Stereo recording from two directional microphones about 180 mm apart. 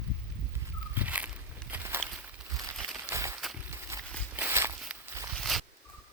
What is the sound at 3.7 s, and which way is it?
Walk, 15° right (ahead or behind).